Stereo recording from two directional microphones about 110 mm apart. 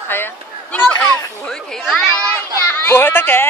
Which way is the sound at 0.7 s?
10° left (ahead or behind).